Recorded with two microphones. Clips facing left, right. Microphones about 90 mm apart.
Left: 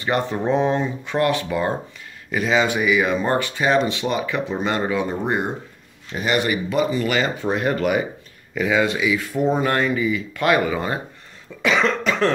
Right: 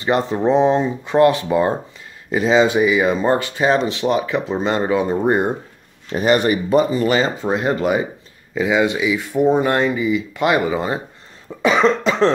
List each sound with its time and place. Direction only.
0.0 s speech: 25° right (ahead or behind)
6.1 s speech: 40° right (ahead or behind); by 11.0 s 20° right (ahead or behind)
11.6 s cough: 30° right (ahead or behind)